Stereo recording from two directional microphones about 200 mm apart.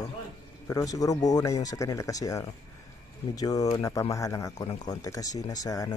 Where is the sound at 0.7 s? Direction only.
15° left (ahead or behind).